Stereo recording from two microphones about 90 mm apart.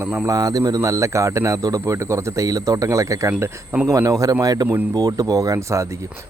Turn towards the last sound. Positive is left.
turn(degrees=-35)  # may be behind; listen again after turning